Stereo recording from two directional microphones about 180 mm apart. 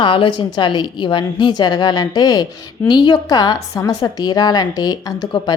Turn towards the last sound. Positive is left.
turn(degrees=20)  # may be behind; listen again after turning